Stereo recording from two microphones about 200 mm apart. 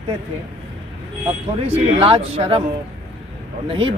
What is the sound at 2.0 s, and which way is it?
Speech, 30° right (ahead or behind).